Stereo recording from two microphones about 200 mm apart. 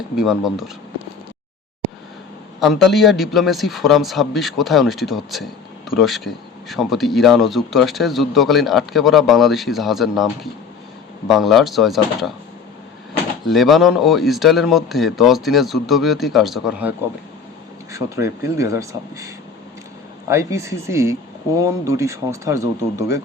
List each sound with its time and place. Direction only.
0.2 s speech: centre (ahead or behind)
2.6 s speech: centre (ahead or behind)
13.4 s speech: centre (ahead or behind)
17.9 s speech: 15° right (ahead or behind)